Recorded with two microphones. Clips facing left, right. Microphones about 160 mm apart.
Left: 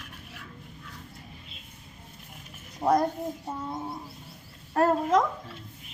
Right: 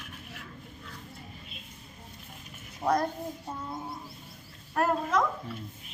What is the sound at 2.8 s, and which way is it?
Speech, 25° left (ahead or behind).